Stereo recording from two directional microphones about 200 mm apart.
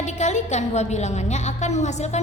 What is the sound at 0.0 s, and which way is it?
A woman's voice, 35° left (ahead or behind).